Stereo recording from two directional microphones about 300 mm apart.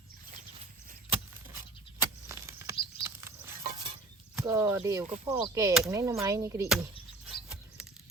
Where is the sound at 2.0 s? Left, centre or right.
Centre.